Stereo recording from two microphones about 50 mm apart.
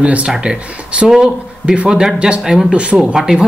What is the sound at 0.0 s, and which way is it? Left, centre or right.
Speech, right.